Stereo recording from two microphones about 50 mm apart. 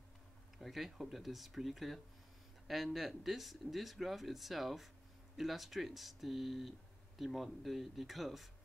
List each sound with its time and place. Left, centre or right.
0.6 s speech: centre